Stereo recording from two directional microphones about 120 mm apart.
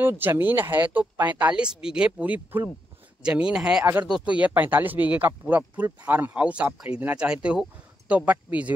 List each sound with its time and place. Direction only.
0.0 s speech: 15° right (ahead or behind)